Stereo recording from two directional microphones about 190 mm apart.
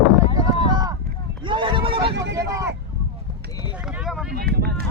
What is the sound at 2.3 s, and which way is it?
Vehicle, 15° right (ahead or behind).